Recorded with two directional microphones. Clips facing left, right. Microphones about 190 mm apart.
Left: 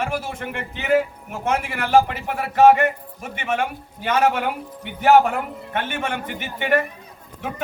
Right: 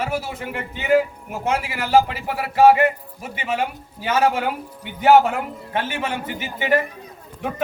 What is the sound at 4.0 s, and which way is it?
A man's voice, 5° right (ahead or behind).